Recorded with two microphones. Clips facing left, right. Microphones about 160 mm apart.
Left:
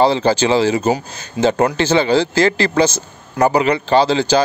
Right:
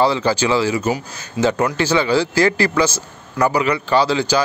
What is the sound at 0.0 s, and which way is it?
A man's voice, 25° left (ahead or behind).